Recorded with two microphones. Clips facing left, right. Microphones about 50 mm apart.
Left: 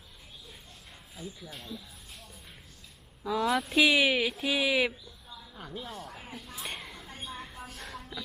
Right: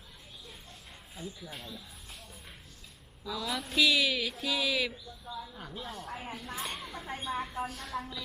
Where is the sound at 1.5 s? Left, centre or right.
Centre.